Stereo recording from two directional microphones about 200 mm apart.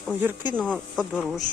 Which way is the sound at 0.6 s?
5° left (ahead or behind).